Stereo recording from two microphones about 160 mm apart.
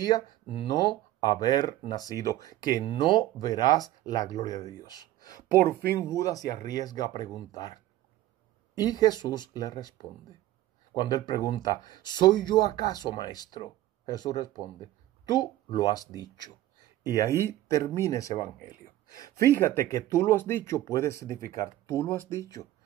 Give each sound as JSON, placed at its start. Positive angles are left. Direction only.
{"t": 0.0, "sound": "speech", "side_deg": 30}